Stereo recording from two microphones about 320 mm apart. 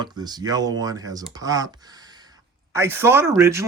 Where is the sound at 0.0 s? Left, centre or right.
Centre.